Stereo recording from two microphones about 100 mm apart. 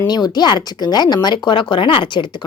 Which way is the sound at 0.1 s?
45° left (ahead or behind).